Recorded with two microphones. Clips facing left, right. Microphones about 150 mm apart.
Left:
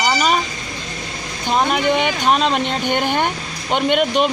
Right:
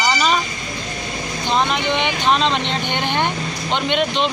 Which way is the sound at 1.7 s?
45° left (ahead or behind).